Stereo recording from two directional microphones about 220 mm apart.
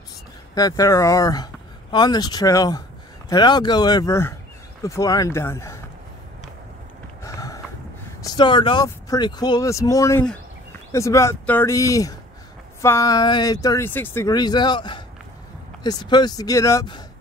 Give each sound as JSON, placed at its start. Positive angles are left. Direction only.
{"t": 0.6, "sound": "speech", "side_deg": 15}
{"t": 7.2, "sound": "a sound", "side_deg": 15}
{"t": 8.2, "sound": "speech", "side_deg": 20}